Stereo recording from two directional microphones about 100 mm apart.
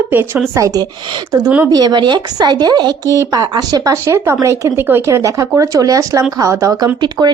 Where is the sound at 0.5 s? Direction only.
35° right (ahead or behind).